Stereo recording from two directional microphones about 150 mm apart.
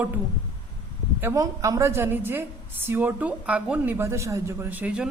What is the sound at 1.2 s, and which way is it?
A man's voice, 20° right (ahead or behind).